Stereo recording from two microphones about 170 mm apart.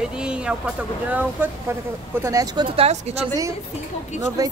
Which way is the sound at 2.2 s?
20° right (ahead or behind).